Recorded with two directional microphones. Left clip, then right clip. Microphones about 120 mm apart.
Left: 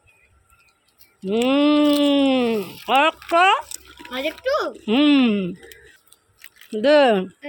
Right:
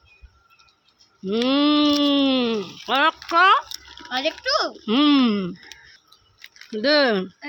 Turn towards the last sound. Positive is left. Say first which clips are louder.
# left 4 dB
turn(degrees=5)  # may be behind; listen again after turning